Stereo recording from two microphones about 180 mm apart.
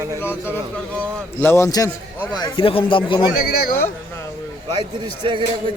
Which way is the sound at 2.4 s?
30° left (ahead or behind).